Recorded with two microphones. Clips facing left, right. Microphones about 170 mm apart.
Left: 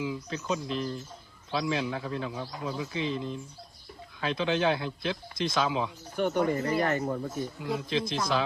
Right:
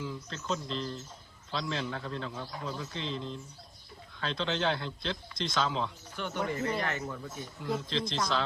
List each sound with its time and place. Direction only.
0.0 s a man's voice: 10° left (ahead or behind)
6.1 s speech: 50° left (ahead or behind)
7.9 s a man's voice: 10° left (ahead or behind)